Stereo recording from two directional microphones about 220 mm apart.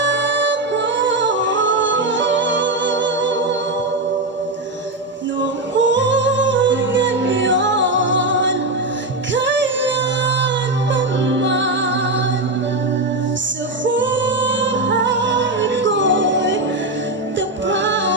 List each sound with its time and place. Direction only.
0.0 s music: 55° right (ahead or behind)
5.4 s music: 55° right (ahead or behind)
13.8 s music: 55° right (ahead or behind)
17.7 s music: 55° right (ahead or behind)